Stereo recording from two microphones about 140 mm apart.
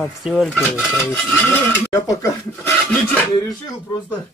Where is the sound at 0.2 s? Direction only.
Centre (ahead or behind).